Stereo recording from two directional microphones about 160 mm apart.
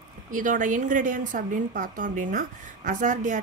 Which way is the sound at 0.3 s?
55° right (ahead or behind).